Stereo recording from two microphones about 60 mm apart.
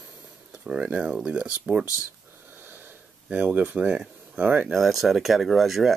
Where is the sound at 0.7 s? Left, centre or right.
Centre.